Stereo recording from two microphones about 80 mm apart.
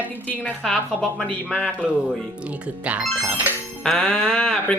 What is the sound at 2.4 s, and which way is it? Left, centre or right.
Speech, centre.